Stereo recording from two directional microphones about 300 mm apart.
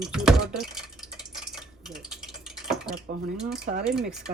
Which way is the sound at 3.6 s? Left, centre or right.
Right.